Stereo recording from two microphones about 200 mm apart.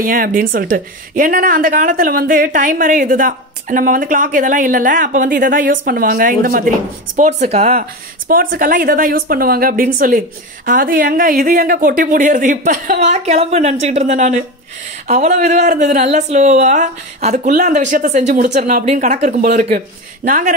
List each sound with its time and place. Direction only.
0.0 s a woman's voice: 45° right (ahead or behind)
7.2 s speech: 35° right (ahead or behind)
8.3 s a woman's voice: 45° right (ahead or behind)